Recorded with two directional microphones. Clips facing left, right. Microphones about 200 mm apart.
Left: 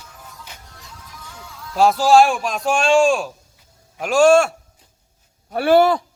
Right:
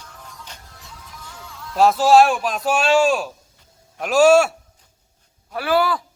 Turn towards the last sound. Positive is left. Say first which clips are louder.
# left 6 dB
turn(degrees=25)  # may be behind; listen again after turning